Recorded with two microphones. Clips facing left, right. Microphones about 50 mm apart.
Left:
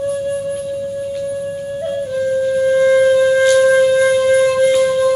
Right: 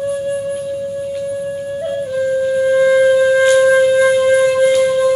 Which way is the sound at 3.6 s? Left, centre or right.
Centre.